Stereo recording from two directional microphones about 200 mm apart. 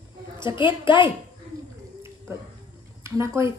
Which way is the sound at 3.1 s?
15° right (ahead or behind).